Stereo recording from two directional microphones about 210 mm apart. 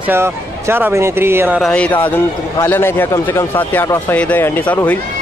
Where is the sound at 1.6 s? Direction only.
5° left (ahead or behind).